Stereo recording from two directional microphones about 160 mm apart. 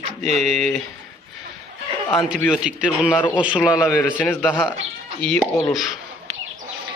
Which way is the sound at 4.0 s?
10° left (ahead or behind).